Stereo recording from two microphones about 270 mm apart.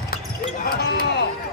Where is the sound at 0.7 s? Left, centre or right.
Left.